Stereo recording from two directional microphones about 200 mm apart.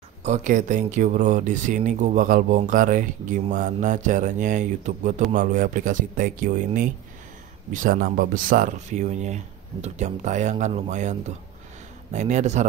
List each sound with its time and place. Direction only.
0.2 s speech: 40° right (ahead or behind)